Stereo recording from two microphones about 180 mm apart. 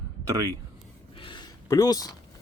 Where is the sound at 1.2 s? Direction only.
25° left (ahead or behind).